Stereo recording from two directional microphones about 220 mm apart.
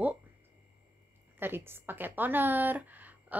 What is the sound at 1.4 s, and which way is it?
A woman's voice, 10° right (ahead or behind).